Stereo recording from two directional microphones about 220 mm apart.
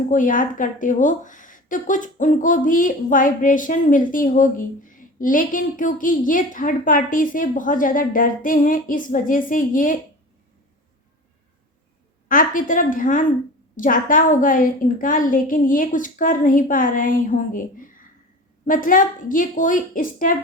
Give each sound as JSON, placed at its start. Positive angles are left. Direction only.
{"t": 0.1, "sound": "a woman's voice", "side_deg": 35}
{"t": 12.3, "sound": "a woman's voice", "side_deg": 40}